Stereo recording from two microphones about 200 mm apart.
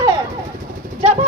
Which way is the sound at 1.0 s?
35° right (ahead or behind).